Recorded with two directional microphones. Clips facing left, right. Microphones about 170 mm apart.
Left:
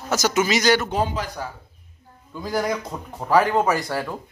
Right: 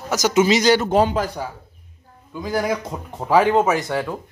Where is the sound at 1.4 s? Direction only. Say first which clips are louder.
Right 3 dB; 15° right (ahead or behind).